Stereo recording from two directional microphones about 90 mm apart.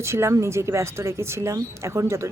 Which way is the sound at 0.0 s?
30° right (ahead or behind).